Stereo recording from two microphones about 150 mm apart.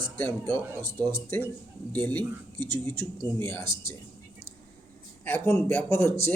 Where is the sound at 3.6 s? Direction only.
30° right (ahead or behind).